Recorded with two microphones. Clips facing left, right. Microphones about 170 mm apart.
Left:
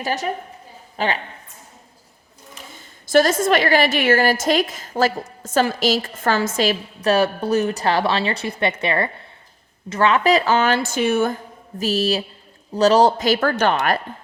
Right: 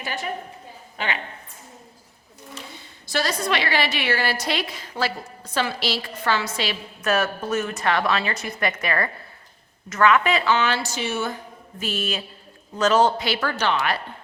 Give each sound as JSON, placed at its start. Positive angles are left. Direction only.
{"t": 0.0, "sound": "a woman's voice", "side_deg": 40}
{"t": 2.6, "sound": "a woman's voice", "side_deg": 45}
{"t": 11.8, "sound": "a woman's voice", "side_deg": 35}